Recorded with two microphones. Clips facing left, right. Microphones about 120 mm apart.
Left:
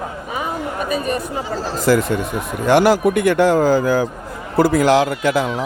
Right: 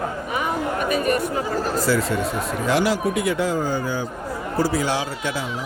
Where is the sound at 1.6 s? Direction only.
80° left.